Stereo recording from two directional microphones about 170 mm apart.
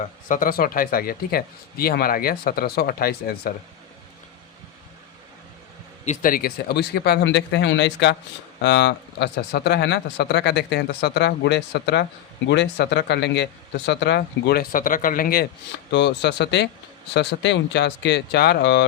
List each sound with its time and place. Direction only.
0.3 s speech: 55° left (ahead or behind)
6.1 s speech: 55° left (ahead or behind)
15.9 s speech: 90° left